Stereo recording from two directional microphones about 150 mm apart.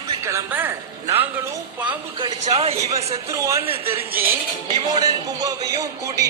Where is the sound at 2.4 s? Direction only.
45° right (ahead or behind).